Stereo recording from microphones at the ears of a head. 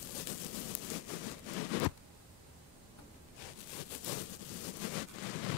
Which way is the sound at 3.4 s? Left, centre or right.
Left.